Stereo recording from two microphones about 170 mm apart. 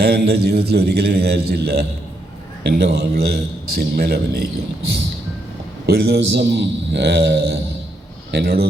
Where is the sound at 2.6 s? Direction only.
80° right.